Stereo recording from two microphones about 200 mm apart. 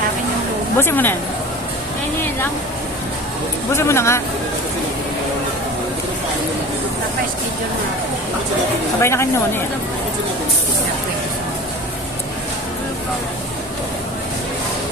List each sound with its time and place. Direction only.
0.8 s speech: 10° left (ahead or behind)
3.7 s speech: 15° left (ahead or behind)
9.0 s speech: 15° left (ahead or behind)